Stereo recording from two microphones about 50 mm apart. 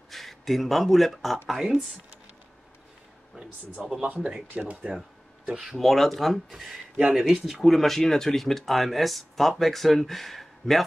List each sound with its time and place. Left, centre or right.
0.1 s speech: centre
4.1 s speech: right
5.5 s speech: centre
5.8 s speech: centre
7.0 s speech: right
7.2 s speech: centre